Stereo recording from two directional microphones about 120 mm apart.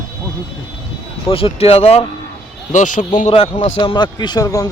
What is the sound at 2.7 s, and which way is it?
Speech, 90° left.